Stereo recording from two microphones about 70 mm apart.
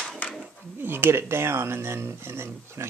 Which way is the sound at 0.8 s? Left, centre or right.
Right.